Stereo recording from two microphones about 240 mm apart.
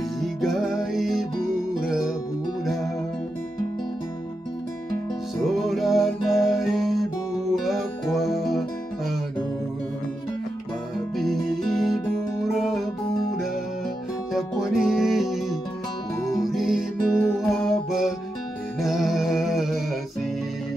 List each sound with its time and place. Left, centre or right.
0.2 s music: centre
5.4 s music: centre
11.1 s music: centre
14.3 s music: centre